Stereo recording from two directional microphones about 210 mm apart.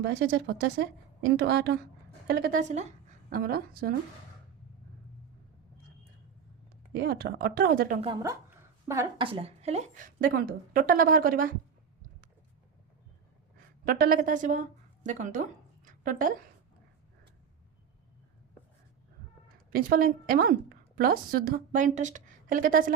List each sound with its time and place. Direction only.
0.0 s a woman's voice: 55° right (ahead or behind)
6.9 s a woman's voice: 50° right (ahead or behind)
8.0 s a woman's voice: 15° right (ahead or behind)
9.2 s a woman's voice: 25° right (ahead or behind); by 11.5 s 45° right (ahead or behind)
13.8 s a woman's voice: 45° right (ahead or behind)
19.7 s a woman's voice: 45° right (ahead or behind)